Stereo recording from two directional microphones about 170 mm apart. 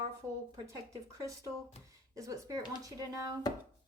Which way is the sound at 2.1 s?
20° right (ahead or behind).